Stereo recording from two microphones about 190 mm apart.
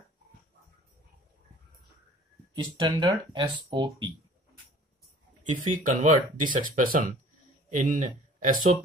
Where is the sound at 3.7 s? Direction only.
25° right (ahead or behind).